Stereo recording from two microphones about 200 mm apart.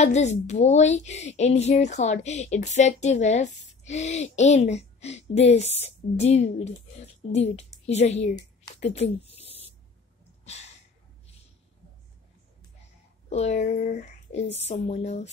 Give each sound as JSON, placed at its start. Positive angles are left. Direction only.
{"t": 0.0, "sound": "a woman's voice", "side_deg": 35}
{"t": 8.7, "sound": "a sound", "side_deg": 35}
{"t": 13.3, "sound": "a woman's voice", "side_deg": 35}